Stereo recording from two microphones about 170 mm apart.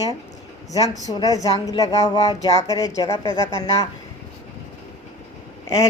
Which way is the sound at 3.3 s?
30° right (ahead or behind).